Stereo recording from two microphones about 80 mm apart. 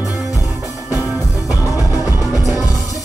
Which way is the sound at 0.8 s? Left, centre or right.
Right.